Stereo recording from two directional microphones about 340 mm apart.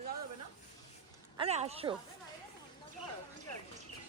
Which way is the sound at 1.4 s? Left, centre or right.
Centre.